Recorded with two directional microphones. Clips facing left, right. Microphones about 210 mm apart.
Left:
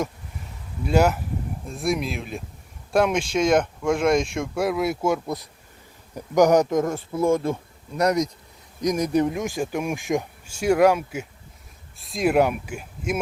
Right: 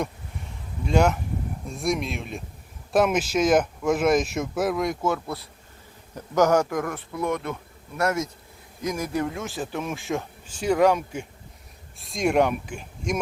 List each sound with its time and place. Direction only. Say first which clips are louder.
0.9 s speech: left 1 dB; 5° left (ahead or behind); by 7.6 s 30° left (ahead or behind)
7.9 s speech: left 4 dB; 15° left (ahead or behind)